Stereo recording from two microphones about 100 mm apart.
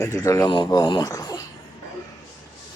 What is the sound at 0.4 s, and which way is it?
Speech, 45° left (ahead or behind).